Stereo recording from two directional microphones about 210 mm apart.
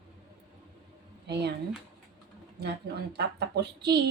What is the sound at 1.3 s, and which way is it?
Speech, 50° right (ahead or behind).